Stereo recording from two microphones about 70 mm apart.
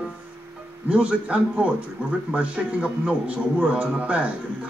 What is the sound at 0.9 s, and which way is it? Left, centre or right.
A man's voice, centre.